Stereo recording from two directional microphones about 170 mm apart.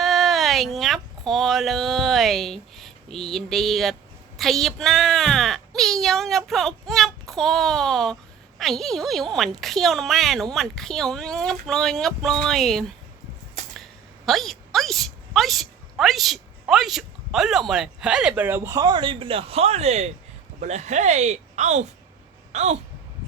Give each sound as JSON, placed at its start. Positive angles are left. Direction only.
{"t": 0.0, "sound": "a sound", "side_deg": 0}
{"t": 4.4, "sound": "speech", "side_deg": 0}
{"t": 14.3, "sound": "a woman's voice", "side_deg": 0}